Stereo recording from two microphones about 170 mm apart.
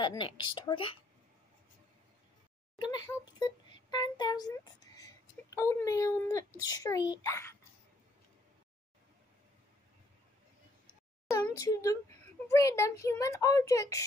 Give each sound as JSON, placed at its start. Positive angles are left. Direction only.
{"t": 0.0, "sound": "a child's voice", "side_deg": 25}
{"t": 2.8, "sound": "a child's voice", "side_deg": 25}
{"t": 11.5, "sound": "a child's voice", "side_deg": 20}